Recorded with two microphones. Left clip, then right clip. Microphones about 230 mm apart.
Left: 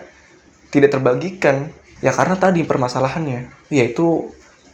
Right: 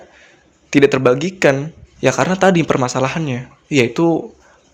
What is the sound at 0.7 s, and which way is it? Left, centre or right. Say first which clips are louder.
A man's voice: right 2 dB; right.